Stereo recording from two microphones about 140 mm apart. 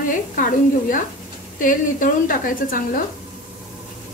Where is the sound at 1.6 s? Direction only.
75° left (ahead or behind).